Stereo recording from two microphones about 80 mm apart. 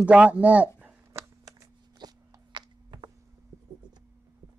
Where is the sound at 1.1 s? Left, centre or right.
Right.